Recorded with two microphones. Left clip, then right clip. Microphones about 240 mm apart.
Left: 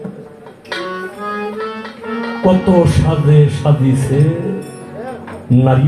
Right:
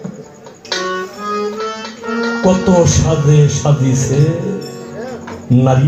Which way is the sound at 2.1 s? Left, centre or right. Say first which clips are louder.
Right 1 dB; right.